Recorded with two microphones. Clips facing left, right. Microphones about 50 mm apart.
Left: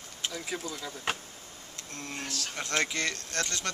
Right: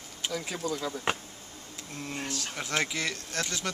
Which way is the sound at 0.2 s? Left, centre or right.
Centre.